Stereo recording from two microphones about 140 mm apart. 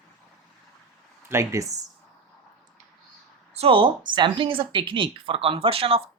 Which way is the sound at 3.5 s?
40° right (ahead or behind).